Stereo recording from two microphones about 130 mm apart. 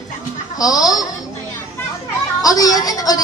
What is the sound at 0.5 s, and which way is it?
Speech, 30° left (ahead or behind).